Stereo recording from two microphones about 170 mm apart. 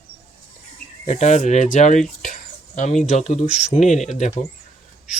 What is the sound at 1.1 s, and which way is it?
Speech, 45° left (ahead or behind).